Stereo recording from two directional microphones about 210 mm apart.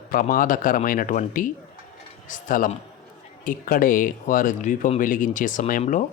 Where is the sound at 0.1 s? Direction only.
40° left (ahead or behind).